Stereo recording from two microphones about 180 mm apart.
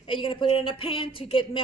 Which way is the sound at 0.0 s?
30° left (ahead or behind).